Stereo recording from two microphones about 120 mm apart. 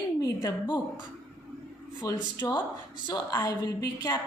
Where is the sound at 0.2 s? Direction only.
40° left (ahead or behind).